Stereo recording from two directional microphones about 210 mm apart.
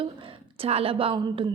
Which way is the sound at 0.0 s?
25° right (ahead or behind).